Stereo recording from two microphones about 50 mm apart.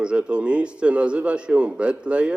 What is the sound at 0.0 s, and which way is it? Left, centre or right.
A man's voice, right.